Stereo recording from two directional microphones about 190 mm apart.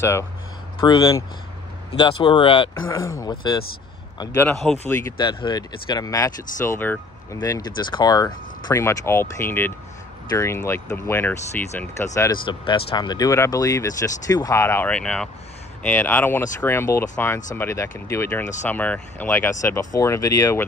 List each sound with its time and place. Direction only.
0.7 s speech: 20° left (ahead or behind)
5.1 s speech: 25° left (ahead or behind)
12.4 s speech: 25° left (ahead or behind)